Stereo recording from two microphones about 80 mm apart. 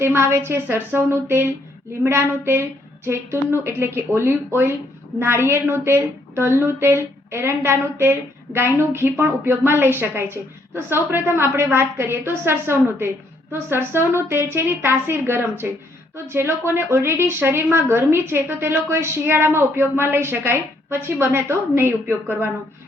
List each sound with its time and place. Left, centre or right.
0.0 s a woman's voice: right